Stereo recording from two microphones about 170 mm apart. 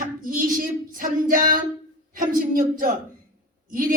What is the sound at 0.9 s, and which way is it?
Female singing, 55° right (ahead or behind).